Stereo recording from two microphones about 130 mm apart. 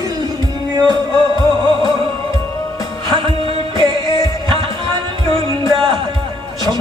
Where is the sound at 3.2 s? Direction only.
40° right (ahead or behind).